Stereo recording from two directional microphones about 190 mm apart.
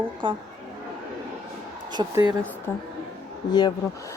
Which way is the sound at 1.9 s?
20° right (ahead or behind).